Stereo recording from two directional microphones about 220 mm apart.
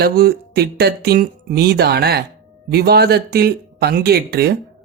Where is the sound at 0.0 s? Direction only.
45° right (ahead or behind).